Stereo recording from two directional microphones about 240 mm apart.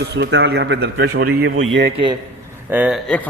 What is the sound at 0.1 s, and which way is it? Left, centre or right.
A man's voice, right.